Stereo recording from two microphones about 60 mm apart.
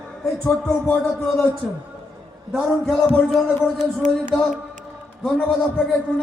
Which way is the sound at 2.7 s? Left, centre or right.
Centre.